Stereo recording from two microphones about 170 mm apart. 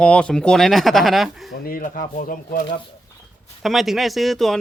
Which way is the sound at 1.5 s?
60° left (ahead or behind).